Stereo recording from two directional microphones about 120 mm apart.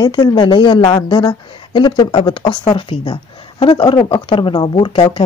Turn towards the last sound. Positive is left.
turn(degrees=45)  # may be behind; listen again after turning